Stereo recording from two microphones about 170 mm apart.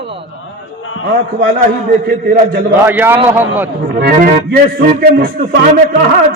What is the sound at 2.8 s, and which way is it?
Speech, 15° right (ahead or behind).